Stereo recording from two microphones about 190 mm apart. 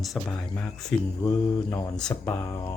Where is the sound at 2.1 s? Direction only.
15° left (ahead or behind).